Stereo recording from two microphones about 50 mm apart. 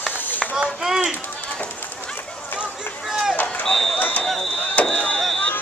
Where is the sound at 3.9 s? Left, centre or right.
Left.